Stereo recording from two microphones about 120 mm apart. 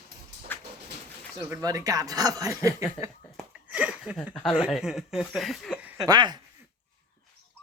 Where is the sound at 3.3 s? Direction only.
10° right (ahead or behind).